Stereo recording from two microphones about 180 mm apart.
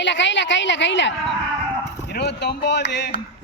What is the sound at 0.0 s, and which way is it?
A woman's voice, 85° left.